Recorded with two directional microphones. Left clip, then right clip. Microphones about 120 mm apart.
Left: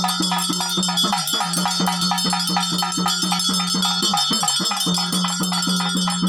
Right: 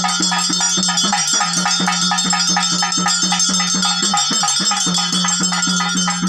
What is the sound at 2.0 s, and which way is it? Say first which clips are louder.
Music: right 4 dB; 10° left (ahead or behind).